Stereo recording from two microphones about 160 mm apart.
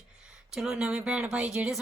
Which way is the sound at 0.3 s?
5° right (ahead or behind).